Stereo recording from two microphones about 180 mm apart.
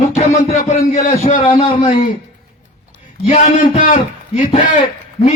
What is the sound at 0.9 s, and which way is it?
Speech, 45° left (ahead or behind).